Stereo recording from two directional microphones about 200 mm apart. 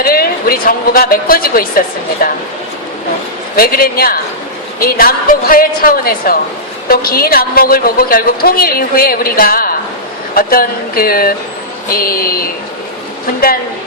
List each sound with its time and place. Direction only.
0.0 s a woman's voice: 50° left (ahead or behind)
3.5 s a woman's voice: 50° left (ahead or behind)